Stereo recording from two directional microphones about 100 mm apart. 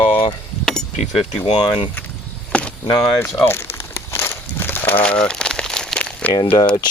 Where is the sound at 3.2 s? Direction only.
25° left (ahead or behind).